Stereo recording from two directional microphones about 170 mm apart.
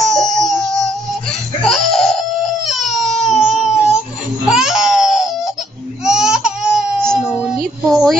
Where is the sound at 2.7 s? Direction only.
Centre (ahead or behind).